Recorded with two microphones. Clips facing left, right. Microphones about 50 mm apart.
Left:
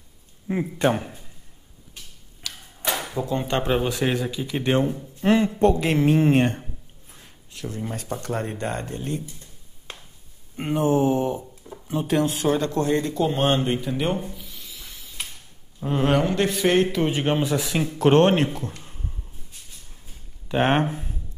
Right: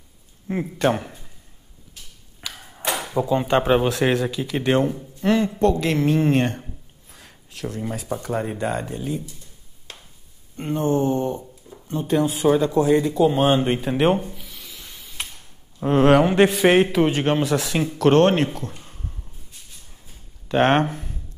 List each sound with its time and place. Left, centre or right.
0.5 s a man's voice: centre
0.8 s speech: centre
2.5 s a sound: right
3.2 s speech: centre
5.2 s a woman's voice: left
6.6 s a sound: centre
7.9 s speech: centre
10.5 s a woman's voice: centre
11.7 s a sound: left
12.1 s speech: centre
13.6 s speech: right
14.2 s a sound: centre; by 16.5 s right
16.5 s a woman's voice: centre
20.4 s speech: centre